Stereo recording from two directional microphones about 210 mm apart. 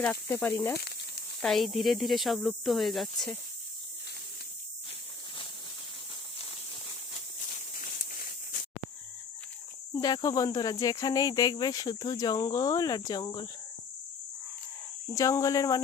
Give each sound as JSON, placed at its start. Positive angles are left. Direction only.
{"t": 0.0, "sound": "speech", "side_deg": 10}
{"t": 7.8, "sound": "a sound", "side_deg": 40}
{"t": 9.9, "sound": "speech", "side_deg": 20}
{"t": 15.1, "sound": "speech", "side_deg": 15}